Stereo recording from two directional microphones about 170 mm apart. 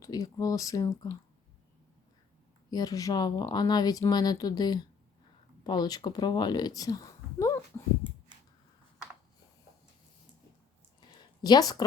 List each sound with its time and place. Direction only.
0.0 s speech: 20° left (ahead or behind)
2.6 s a woman's voice: 20° left (ahead or behind)
11.4 s speech: 25° left (ahead or behind)